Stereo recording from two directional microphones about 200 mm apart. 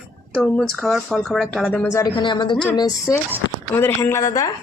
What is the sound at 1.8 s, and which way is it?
Speech, 15° left (ahead or behind).